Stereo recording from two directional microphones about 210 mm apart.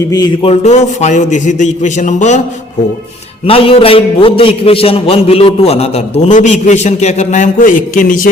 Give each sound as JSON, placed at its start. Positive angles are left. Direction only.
{"t": 0.1, "sound": "a man's voice", "side_deg": 20}
{"t": 0.6, "sound": "a man's voice", "side_deg": 35}
{"t": 3.4, "sound": "a man's voice", "side_deg": 25}